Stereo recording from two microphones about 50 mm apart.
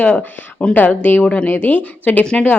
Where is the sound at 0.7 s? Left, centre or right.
Left.